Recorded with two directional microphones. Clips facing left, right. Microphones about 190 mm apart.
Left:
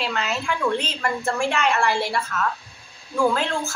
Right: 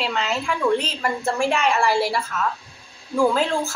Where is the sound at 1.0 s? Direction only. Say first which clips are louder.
Right 1 dB; 5° right (ahead or behind).